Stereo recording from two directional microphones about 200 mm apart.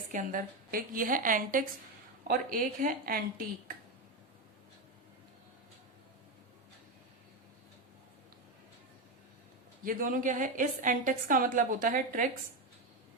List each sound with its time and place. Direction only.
0.1 s a woman's voice: 40° right (ahead or behind)
9.8 s a woman's voice: 45° right (ahead or behind)